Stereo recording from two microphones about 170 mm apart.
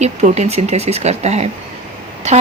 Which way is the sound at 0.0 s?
40° right (ahead or behind).